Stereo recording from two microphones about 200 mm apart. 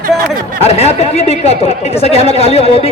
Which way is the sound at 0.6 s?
30° left (ahead or behind).